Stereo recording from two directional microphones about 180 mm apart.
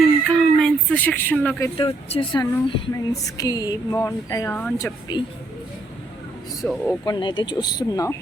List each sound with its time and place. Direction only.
0.3 s a sound: 5° left (ahead or behind)
1.7 s speech: 30° left (ahead or behind)
4.5 s speech: 10° left (ahead or behind)
5.1 s speech: 25° left (ahead or behind)
6.6 s speech: 10° left (ahead or behind)
7.0 s speech: 25° left (ahead or behind)